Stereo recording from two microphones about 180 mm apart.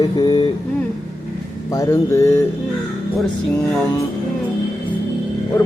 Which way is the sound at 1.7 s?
15° left (ahead or behind).